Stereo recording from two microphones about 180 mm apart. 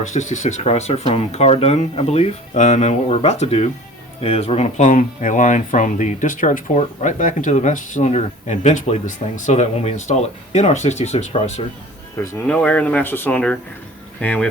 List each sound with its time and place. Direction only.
0.0 s speech: 40° left (ahead or behind)
12.1 s speech: 15° left (ahead or behind)